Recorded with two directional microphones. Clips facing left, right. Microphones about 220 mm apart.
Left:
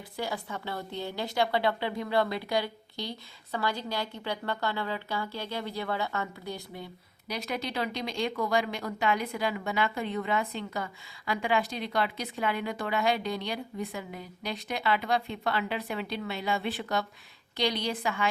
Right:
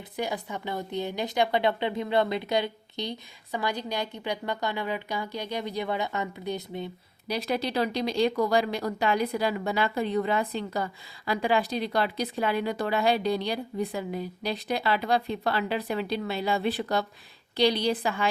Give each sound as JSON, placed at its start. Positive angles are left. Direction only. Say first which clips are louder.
{"t": 0.2, "sound": "a woman's voice", "louder": "right 3 dB", "side_deg": -15}
{"t": 7.3, "sound": "speech", "louder": "right 5 dB", "side_deg": -35}